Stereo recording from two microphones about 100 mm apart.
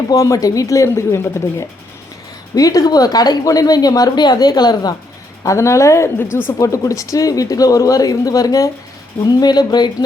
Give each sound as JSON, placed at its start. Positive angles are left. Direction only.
{"t": 0.1, "sound": "speech", "side_deg": 35}
{"t": 5.4, "sound": "speech", "side_deg": 30}